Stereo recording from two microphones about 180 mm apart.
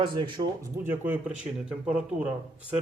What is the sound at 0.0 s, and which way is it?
Speech, 25° right (ahead or behind).